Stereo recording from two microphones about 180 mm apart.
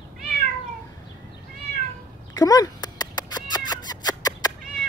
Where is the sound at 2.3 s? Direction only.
20° left (ahead or behind).